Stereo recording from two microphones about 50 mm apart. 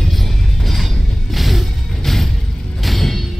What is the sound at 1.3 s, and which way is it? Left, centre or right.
Music, centre.